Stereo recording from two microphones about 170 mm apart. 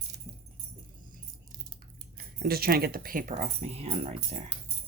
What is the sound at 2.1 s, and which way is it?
Speech, 60° right (ahead or behind).